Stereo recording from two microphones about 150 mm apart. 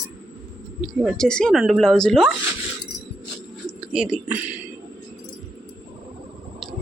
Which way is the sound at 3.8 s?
5° right (ahead or behind).